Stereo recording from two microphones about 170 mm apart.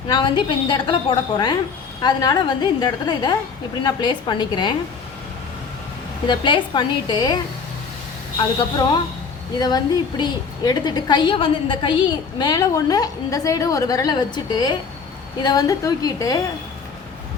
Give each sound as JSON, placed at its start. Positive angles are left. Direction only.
{"t": 0.1, "sound": "a woman's voice", "side_deg": 30}
{"t": 2.0, "sound": "a woman's voice", "side_deg": 25}
{"t": 6.2, "sound": "a woman's voice", "side_deg": 25}
{"t": 8.5, "sound": "a woman's voice", "side_deg": 25}